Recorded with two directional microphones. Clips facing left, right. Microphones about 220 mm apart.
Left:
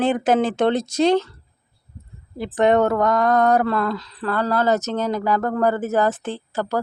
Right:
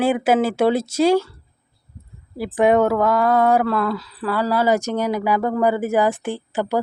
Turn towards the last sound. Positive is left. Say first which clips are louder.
# right 2 dB
turn(degrees=-15)  # may be behind; listen again after turning